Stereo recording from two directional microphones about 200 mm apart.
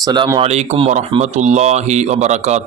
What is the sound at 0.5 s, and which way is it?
Speech, 35° right (ahead or behind).